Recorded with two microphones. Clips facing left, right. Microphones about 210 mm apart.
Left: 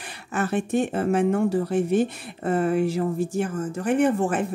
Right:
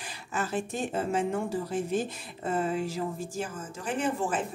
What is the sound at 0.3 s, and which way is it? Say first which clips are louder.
A woman's voice: left 8 dB; 65° left (ahead or behind).